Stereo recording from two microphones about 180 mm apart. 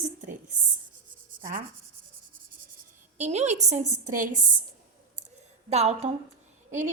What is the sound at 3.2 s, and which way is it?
A woman's voice, 40° right (ahead or behind).